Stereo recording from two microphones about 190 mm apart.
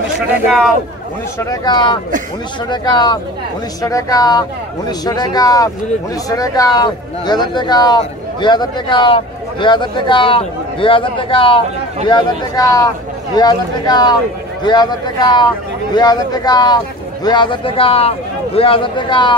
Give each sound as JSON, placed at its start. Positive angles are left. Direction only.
{"t": 1.4, "sound": "speech", "side_deg": 20}